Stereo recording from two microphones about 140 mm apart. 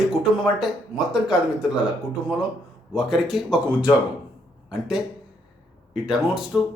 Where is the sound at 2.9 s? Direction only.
Centre (ahead or behind).